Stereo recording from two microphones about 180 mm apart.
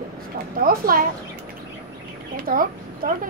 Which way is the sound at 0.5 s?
55° right (ahead or behind).